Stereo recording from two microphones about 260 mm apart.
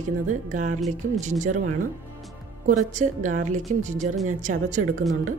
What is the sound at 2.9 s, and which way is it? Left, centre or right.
Speech, right.